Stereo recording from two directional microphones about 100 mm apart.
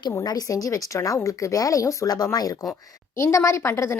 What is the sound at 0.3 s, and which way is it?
A woman's voice, 40° left (ahead or behind).